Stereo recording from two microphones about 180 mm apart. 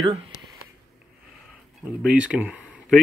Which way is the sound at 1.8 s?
5° right (ahead or behind).